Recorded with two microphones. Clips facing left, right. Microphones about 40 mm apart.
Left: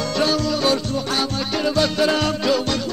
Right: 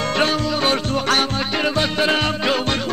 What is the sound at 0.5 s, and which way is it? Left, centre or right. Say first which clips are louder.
Music: even; right.